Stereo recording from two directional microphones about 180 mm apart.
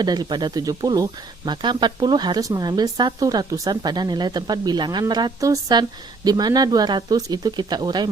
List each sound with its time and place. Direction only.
0.0 s speech: 25° right (ahead or behind)